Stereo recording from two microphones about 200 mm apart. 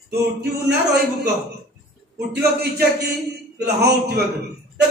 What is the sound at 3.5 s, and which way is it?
Speech, 55° right (ahead or behind).